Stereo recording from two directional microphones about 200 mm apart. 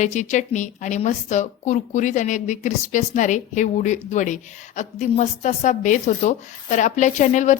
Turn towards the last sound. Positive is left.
turn(degrees=35)  # may be behind; listen again after turning